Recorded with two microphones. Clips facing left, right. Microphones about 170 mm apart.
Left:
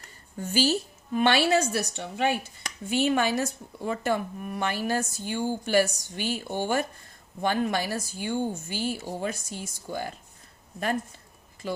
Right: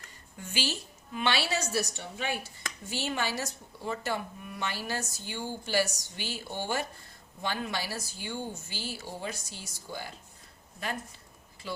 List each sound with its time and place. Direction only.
0.0 s a woman's voice: 40° left (ahead or behind)
11.6 s a woman's voice: 50° left (ahead or behind)